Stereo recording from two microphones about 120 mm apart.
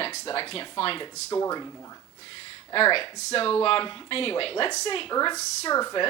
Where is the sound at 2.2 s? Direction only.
45° left (ahead or behind).